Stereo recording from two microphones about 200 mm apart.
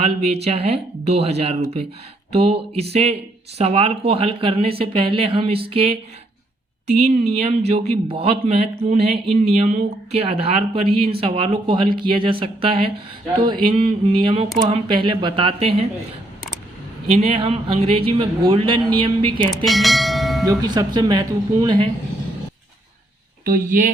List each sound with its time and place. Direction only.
0.0 s speech: 30° right (ahead or behind)
17.1 s speech: 30° right (ahead or behind)
19.6 s bell: centre (ahead or behind)
20.4 s speech: 20° right (ahead or behind)
23.5 s speech: 40° right (ahead or behind)